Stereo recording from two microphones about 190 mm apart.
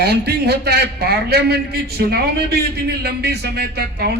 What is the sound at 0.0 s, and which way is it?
A man's voice, 60° right (ahead or behind).